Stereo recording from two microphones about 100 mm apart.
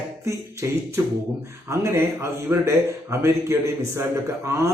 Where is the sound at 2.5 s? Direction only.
30° right (ahead or behind).